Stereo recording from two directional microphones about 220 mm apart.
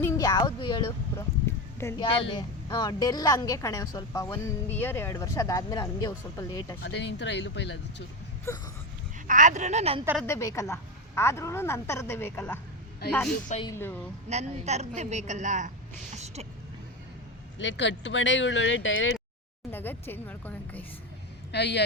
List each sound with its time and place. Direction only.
0.0 s a sound: 15° left (ahead or behind)
1.8 s a woman's voice: 10° left (ahead or behind)
2.0 s a woman's voice: 25° left (ahead or behind)
6.8 s speech: 50° left (ahead or behind)
8.5 s a woman's voice: 15° left (ahead or behind)
9.2 s a woman's voice: 35° right (ahead or behind)
10.2 s a woman's voice: 15° left (ahead or behind)
13.7 s a woman's voice: 10° left (ahead or behind)
14.3 s a woman's voice: 30° right (ahead or behind)
16.1 s vehicle: 30° right (ahead or behind)
17.6 s speech: 55° left (ahead or behind)
19.7 s a woman's voice: 10° left (ahead or behind)
21.5 s speech: 50° left (ahead or behind)